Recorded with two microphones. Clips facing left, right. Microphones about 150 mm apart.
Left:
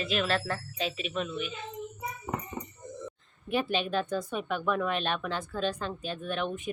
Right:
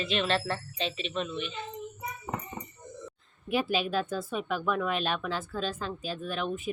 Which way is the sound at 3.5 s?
5° right (ahead or behind).